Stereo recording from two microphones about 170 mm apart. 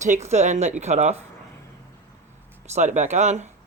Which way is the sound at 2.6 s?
40° right (ahead or behind).